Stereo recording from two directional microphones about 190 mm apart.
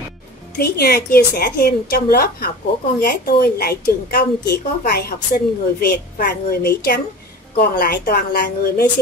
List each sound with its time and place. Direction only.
0.6 s a woman's voice: 55° left (ahead or behind)